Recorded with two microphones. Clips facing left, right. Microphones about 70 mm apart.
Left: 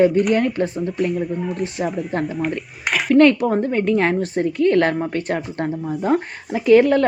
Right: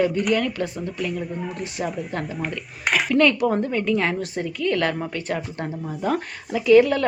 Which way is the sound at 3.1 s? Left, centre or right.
Left.